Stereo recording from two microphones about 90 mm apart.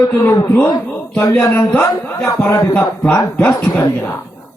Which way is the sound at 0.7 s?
15° left (ahead or behind).